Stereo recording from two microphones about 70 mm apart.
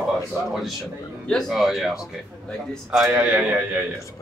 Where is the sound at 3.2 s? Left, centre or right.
Right.